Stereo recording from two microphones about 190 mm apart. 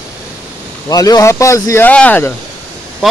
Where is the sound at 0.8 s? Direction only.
20° left (ahead or behind).